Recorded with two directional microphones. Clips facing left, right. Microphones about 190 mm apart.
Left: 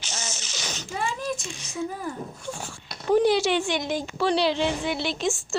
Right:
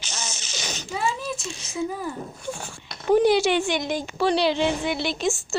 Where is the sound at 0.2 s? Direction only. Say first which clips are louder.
Right 3 dB; 15° right (ahead or behind).